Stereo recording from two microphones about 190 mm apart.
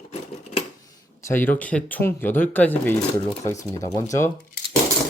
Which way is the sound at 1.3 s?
10° left (ahead or behind).